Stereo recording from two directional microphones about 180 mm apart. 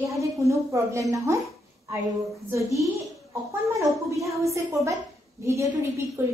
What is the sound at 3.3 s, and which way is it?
A woman's voice, 15° right (ahead or behind).